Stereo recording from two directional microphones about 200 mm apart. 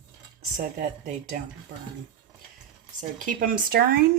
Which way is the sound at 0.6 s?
50° right (ahead or behind).